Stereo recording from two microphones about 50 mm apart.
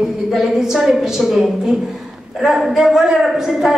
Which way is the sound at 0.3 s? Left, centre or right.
Centre.